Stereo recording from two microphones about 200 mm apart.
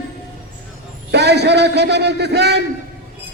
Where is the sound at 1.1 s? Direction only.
55° right (ahead or behind).